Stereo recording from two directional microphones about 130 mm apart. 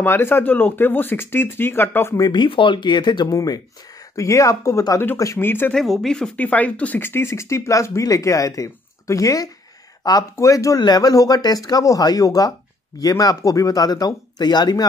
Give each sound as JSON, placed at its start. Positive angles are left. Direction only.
{"t": 0.0, "sound": "speech", "side_deg": 15}
{"t": 2.2, "sound": "speech", "side_deg": 35}
{"t": 5.8, "sound": "speech", "side_deg": 5}